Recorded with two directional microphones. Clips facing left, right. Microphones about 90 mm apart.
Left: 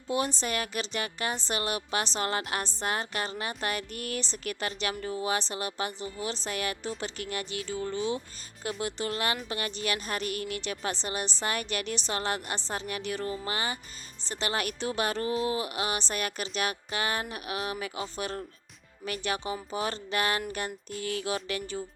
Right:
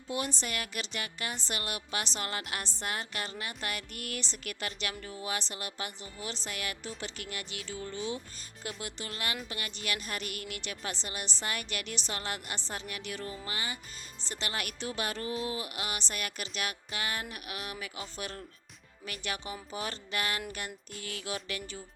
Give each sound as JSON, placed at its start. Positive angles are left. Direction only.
{"t": 0.1, "sound": "a woman's voice", "side_deg": 35}